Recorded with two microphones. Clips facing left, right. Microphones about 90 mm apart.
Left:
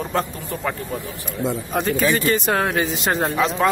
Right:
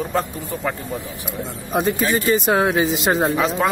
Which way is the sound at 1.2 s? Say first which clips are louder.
Left 4 dB; 15° right (ahead or behind).